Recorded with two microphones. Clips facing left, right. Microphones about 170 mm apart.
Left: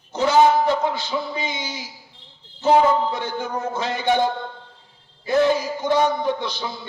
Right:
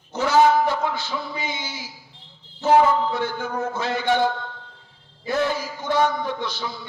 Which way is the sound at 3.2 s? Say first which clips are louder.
Right 1 dB; 15° left (ahead or behind).